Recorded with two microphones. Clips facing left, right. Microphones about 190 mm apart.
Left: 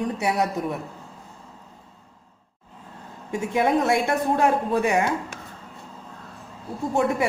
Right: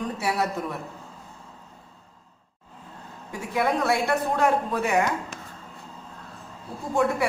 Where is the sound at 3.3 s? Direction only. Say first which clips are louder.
Left 4 dB; 25° left (ahead or behind).